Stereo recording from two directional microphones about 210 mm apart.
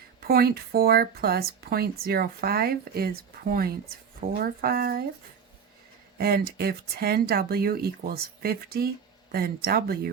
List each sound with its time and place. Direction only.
0.2 s speech: 45° right (ahead or behind)
6.1 s speech: 45° right (ahead or behind)